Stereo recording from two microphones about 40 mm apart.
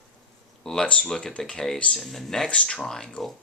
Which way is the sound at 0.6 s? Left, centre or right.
Centre.